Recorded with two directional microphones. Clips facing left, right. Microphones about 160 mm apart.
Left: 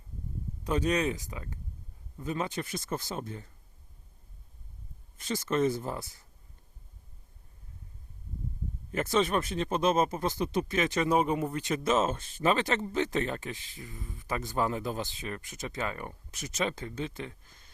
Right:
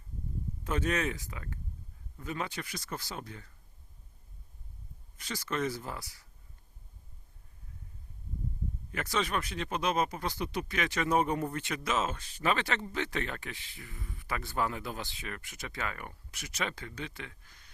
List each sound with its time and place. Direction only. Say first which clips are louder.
0.6 s speech: left 4 dB; 15° left (ahead or behind)
5.2 s speech: left 6 dB; 25° left (ahead or behind)
8.9 s speech: left 6 dB; 25° left (ahead or behind)
11.3 s speech: left 2 dB; 10° left (ahead or behind)
11.7 s speech: left 7 dB; 25° left (ahead or behind)